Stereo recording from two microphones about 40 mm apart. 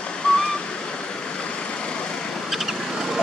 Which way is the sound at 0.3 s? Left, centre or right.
Left.